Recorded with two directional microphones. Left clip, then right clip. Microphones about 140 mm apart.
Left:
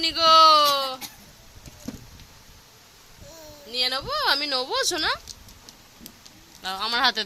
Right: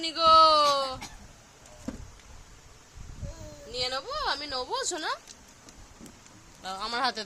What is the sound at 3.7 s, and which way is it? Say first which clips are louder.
Speech: left 6 dB; 45° left (ahead or behind).